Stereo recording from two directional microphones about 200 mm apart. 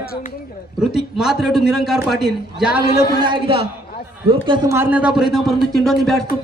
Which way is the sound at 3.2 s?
25° right (ahead or behind).